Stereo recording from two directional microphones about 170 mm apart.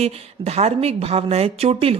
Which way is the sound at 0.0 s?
35° right (ahead or behind).